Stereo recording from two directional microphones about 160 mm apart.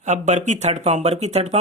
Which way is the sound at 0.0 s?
50° right (ahead or behind).